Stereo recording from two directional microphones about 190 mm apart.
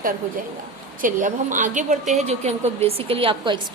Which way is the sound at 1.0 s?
45° right (ahead or behind).